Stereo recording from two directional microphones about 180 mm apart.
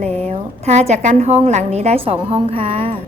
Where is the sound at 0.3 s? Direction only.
40° right (ahead or behind).